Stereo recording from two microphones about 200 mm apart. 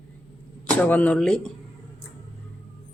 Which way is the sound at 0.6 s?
5° left (ahead or behind).